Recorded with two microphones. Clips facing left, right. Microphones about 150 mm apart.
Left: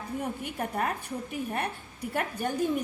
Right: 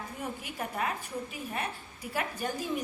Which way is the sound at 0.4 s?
55° left (ahead or behind).